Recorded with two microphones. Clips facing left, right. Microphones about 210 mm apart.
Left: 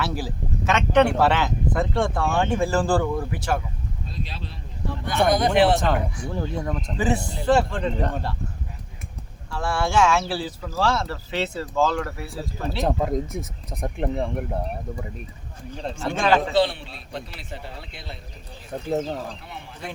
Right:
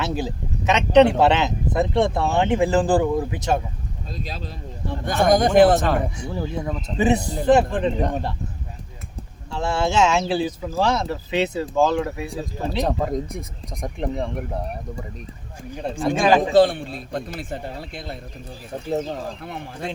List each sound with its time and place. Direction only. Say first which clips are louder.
0.0 s speech: right 2 dB; 20° right (ahead or behind)
5.0 s a man's voice: right 3 dB; 45° right (ahead or behind)
5.8 s speech: right 1 dB; centre (ahead or behind)
6.9 s speech: right 5 dB; 20° right (ahead or behind)
9.5 s speech: right 2 dB; 20° right (ahead or behind)
12.8 s speech: left 1 dB; centre (ahead or behind)
15.7 s speech: right 5 dB; 15° right (ahead or behind)
16.6 s a man's voice: right 6 dB; 50° right (ahead or behind)